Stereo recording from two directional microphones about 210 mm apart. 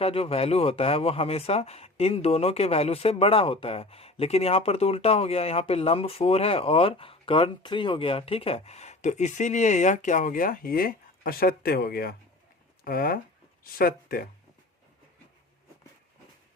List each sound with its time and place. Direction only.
0.0 s speech: 25° left (ahead or behind); by 14.3 s 45° left (ahead or behind)